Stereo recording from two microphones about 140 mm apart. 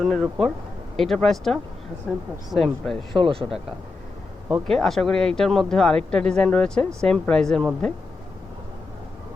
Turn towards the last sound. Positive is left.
turn(degrees=5)  # may be behind; listen again after turning